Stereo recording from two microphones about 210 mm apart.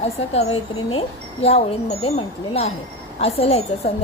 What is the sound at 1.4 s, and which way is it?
A woman's voice, 30° left (ahead or behind).